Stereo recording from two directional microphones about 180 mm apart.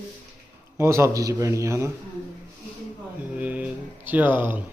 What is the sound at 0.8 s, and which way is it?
Speech, 15° right (ahead or behind).